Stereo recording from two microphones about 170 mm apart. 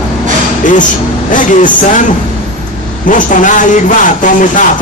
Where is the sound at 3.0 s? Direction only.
50° left (ahead or behind).